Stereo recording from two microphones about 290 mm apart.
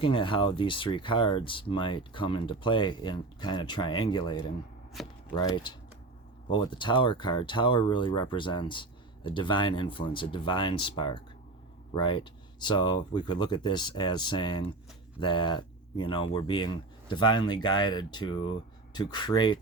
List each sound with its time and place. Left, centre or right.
0.0 s speech: centre
5.0 s speech: centre
5.3 s speech: centre